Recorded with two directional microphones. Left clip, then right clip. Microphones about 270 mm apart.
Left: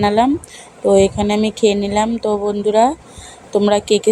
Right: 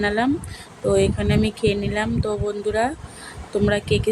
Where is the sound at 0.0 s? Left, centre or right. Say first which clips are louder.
Left 7 dB; centre.